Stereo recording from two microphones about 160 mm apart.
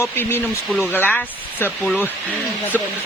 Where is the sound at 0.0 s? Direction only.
15° left (ahead or behind).